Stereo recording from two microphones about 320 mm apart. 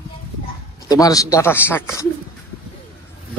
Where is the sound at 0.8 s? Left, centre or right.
Centre.